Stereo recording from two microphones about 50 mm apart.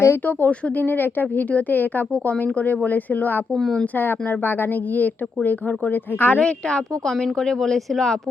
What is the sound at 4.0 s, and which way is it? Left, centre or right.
Speech, left.